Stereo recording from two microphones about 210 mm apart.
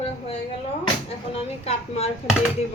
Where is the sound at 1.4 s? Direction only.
30° left (ahead or behind).